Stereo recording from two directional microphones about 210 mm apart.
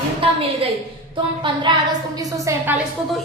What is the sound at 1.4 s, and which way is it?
A woman's voice, 20° right (ahead or behind).